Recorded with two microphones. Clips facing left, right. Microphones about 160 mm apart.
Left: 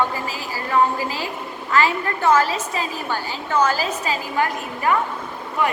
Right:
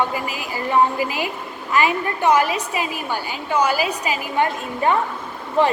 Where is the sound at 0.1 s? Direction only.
15° right (ahead or behind).